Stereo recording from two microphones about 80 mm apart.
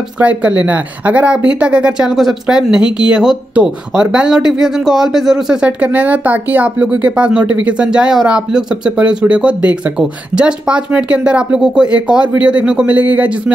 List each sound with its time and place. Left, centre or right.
0.2 s speech: centre
5.7 s speech: centre